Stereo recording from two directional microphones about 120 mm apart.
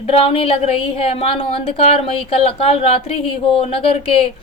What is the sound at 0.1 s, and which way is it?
A woman's voice, 55° left (ahead or behind).